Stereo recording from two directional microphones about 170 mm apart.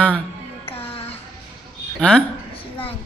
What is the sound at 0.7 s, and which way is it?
Music, 35° left (ahead or behind).